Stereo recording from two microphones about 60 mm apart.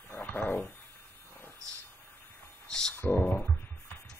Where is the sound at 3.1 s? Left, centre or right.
Left.